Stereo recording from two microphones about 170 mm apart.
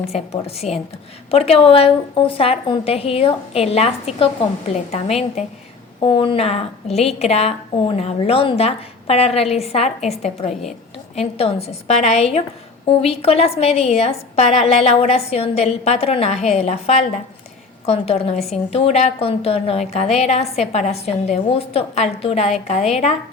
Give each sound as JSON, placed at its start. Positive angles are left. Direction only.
{"t": 0.0, "sound": "a woman's voice", "side_deg": 35}